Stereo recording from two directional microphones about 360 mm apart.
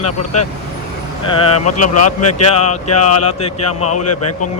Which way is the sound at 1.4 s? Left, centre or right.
Left.